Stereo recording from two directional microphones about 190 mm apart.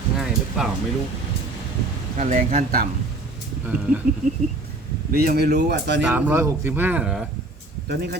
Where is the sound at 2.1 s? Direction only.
45° right (ahead or behind).